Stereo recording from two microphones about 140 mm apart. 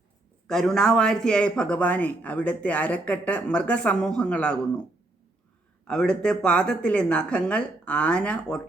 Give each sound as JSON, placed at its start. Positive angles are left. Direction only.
{"t": 0.4, "sound": "speech", "side_deg": 5}
{"t": 5.9, "sound": "speech", "side_deg": 5}